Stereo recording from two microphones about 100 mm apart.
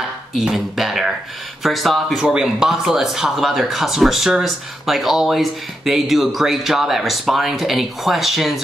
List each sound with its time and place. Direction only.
0.3 s speech: 5° right (ahead or behind)